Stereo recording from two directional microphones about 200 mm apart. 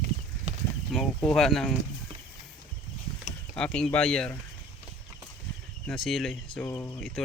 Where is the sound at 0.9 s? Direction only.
Centre (ahead or behind).